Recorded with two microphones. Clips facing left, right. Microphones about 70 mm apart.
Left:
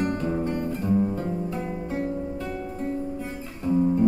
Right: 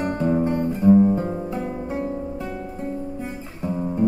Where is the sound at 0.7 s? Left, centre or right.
Centre.